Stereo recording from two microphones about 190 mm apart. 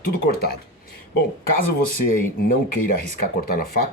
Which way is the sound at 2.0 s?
50° left (ahead or behind).